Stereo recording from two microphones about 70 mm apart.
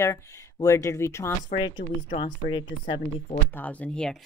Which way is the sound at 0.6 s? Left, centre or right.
Left.